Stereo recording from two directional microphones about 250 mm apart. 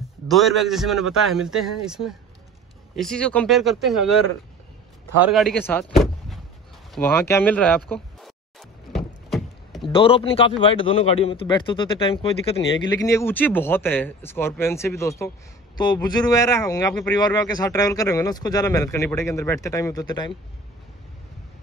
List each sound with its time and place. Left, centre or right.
0.3 s a man's voice: centre
5.3 s speech: centre
6.9 s a sound: centre
9.8 s speech: left